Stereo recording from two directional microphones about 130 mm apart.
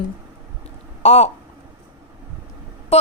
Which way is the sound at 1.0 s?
55° left (ahead or behind).